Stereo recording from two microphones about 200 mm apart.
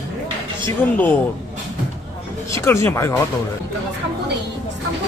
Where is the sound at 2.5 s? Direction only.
15° left (ahead or behind).